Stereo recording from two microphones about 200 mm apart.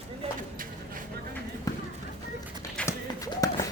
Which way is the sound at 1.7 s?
15° left (ahead or behind).